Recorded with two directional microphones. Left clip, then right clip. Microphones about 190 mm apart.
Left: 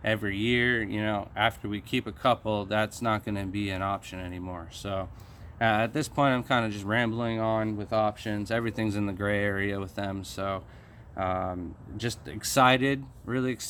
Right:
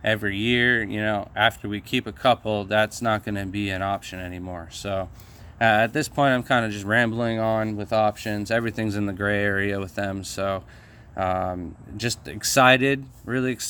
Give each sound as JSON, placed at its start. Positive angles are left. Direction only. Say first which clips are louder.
{"t": 0.0, "sound": "speech", "louder": "right 5 dB", "side_deg": -25}